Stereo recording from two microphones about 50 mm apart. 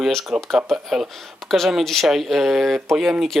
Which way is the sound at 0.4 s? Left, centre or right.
Centre.